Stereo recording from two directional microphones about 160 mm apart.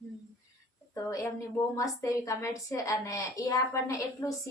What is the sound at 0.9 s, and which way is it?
A woman's voice, 20° left (ahead or behind).